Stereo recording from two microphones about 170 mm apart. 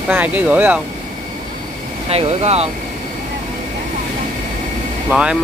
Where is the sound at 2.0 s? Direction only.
35° right (ahead or behind).